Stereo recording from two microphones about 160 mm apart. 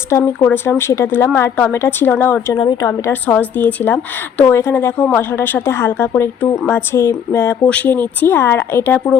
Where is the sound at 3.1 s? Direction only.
10° left (ahead or behind).